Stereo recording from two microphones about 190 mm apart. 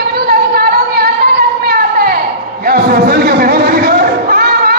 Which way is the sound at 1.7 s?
55° right (ahead or behind).